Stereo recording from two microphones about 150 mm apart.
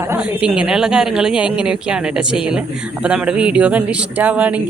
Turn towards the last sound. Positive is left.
turn(degrees=-10)  # may be behind; listen again after turning